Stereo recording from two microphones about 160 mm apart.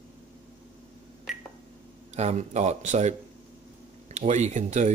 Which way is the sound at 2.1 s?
45° right (ahead or behind).